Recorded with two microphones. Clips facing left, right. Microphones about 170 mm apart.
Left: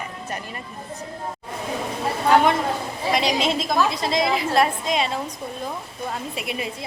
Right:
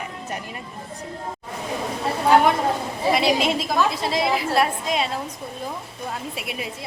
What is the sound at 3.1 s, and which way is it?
A woman's voice, 5° right (ahead or behind).